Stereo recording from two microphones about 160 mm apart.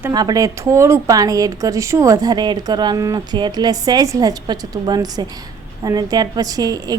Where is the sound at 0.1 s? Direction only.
25° right (ahead or behind).